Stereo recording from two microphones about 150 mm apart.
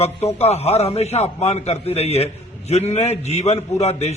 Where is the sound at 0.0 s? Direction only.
45° left (ahead or behind).